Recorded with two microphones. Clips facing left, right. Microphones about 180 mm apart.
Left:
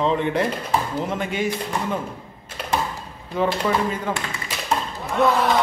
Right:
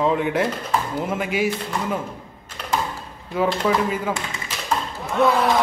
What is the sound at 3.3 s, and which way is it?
Speech, 5° right (ahead or behind).